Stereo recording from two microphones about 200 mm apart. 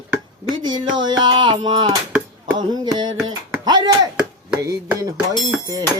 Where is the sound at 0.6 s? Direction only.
20° right (ahead or behind).